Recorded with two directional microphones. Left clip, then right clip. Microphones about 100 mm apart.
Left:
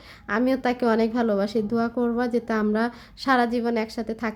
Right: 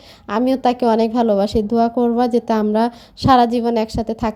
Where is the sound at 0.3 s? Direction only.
35° right (ahead or behind).